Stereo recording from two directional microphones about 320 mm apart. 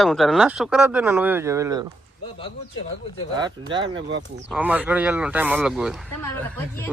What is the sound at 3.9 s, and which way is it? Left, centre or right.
Speech, right.